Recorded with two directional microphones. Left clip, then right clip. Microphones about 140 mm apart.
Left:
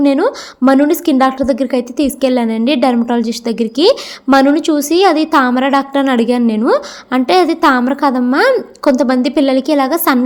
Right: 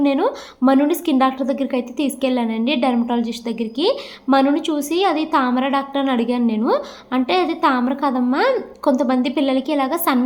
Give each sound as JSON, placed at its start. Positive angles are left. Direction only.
{"t": 0.0, "sound": "a woman's voice", "side_deg": 50}